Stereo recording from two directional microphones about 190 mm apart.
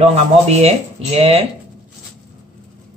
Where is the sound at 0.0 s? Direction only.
35° right (ahead or behind).